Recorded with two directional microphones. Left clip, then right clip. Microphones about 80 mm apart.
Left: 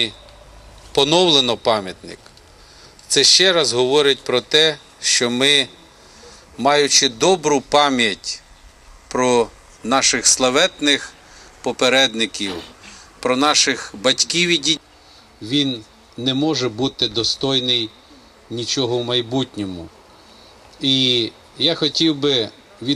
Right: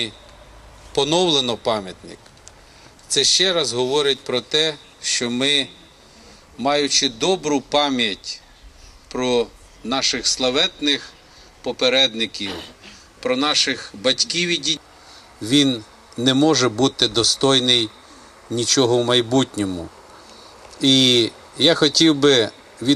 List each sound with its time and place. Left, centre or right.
0.9 s speech: centre; by 12.5 s left
12.5 s speech: centre
13.1 s speech: left
15.4 s speech: right